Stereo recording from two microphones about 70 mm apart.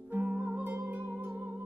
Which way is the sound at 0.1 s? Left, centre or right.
Right.